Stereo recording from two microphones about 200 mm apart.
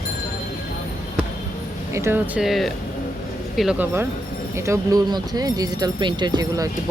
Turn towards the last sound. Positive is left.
turn(degrees=-20)  # may be behind; listen again after turning